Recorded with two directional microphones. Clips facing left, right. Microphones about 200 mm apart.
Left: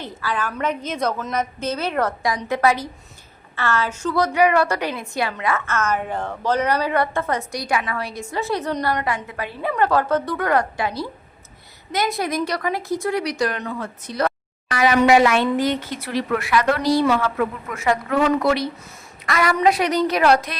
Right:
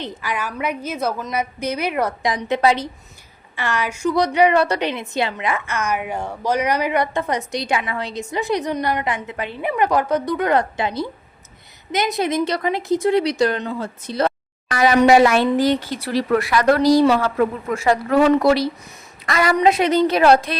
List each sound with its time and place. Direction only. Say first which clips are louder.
0.0 s a woman's voice: even; 15° right (ahead or behind)
14.7 s a woman's voice: right 2 dB; 40° right (ahead or behind)